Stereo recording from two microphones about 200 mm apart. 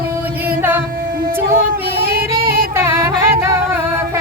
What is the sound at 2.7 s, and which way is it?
Music, 10° right (ahead or behind).